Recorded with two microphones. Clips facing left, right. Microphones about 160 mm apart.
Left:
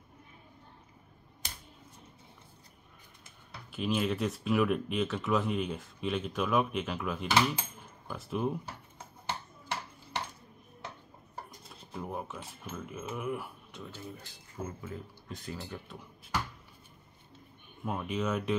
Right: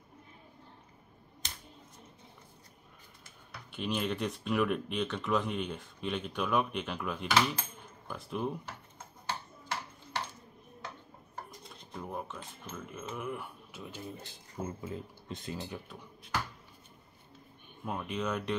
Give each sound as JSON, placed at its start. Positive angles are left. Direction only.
{"t": 3.7, "sound": "speech", "side_deg": 0}
{"t": 11.7, "sound": "speech", "side_deg": 5}
{"t": 13.8, "sound": "speech", "side_deg": -15}
{"t": 17.8, "sound": "speech", "side_deg": 0}